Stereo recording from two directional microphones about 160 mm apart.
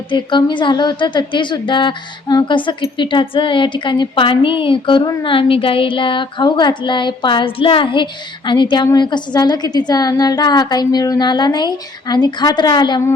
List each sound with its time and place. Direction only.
0.1 s a woman's voice: 30° left (ahead or behind)